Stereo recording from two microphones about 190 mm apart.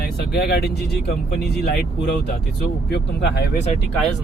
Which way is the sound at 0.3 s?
55° left (ahead or behind).